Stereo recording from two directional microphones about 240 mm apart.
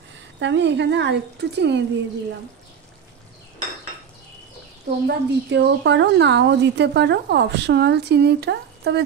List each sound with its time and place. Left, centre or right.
0.4 s speech: right
5.0 s speech: right